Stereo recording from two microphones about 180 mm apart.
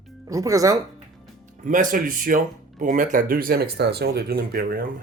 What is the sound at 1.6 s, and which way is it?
Speech, 50° right (ahead or behind).